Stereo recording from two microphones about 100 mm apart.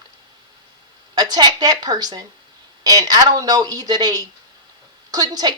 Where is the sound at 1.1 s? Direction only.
40° right (ahead or behind).